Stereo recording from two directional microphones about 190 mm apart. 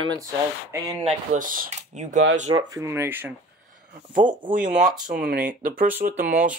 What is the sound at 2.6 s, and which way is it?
Speech, 15° right (ahead or behind).